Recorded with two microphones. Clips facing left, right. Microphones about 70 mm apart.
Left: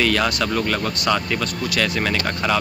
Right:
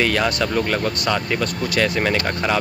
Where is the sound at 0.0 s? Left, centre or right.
Right.